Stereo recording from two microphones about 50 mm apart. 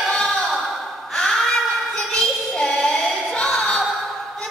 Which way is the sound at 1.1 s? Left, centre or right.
Centre.